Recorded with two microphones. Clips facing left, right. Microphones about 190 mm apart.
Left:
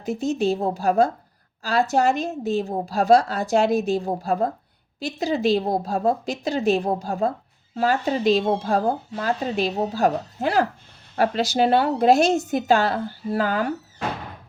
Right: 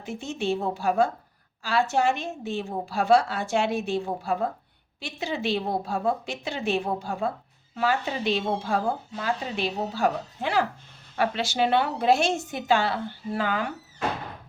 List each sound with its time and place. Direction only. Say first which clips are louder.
0.0 s a woman's voice: left 7 dB; 40° left (ahead or behind)